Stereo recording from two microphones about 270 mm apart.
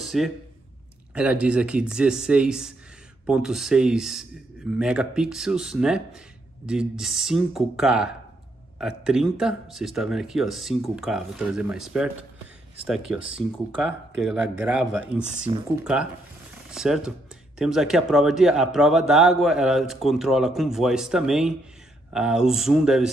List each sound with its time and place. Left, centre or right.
0.0 s a sound: centre
1.1 s a man's voice: centre
13.1 s a man's voice: centre
15.5 s speech: centre
16.7 s a man's voice: centre